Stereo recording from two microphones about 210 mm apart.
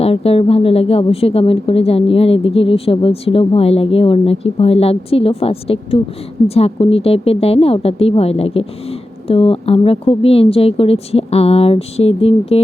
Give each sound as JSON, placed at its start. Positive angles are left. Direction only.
{"t": 0.0, "sound": "speech", "side_deg": 30}